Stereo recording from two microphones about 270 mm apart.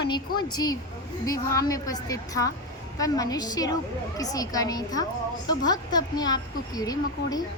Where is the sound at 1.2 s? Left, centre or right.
Centre.